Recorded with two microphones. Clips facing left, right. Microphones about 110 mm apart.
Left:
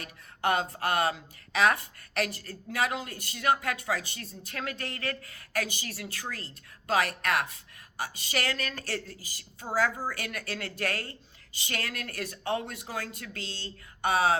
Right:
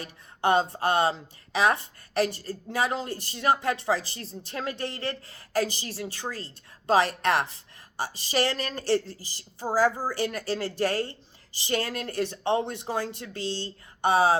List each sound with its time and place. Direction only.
0.0 s speech: 25° right (ahead or behind)